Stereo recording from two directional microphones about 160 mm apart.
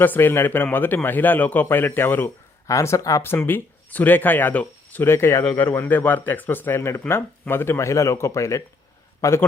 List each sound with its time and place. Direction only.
0.0 s a man's voice: 10° left (ahead or behind)